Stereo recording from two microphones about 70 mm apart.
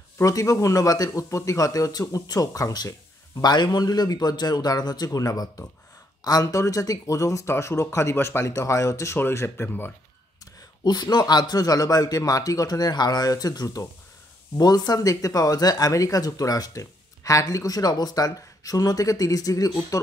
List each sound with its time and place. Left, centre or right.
0.2 s speech: left
3.4 s a man's voice: left
10.8 s a man's voice: left
14.6 s a man's voice: left
15.0 s speech: left